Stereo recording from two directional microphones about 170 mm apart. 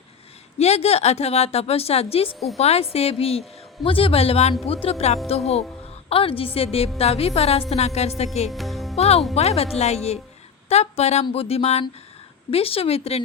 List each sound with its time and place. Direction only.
0.6 s a woman's voice: 40° left (ahead or behind)
8.4 s music: centre (ahead or behind)
9.0 s a woman's voice: 35° left (ahead or behind)